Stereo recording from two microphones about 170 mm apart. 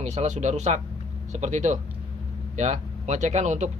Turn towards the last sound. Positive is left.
turn(degrees=-45)  # may be behind; listen again after turning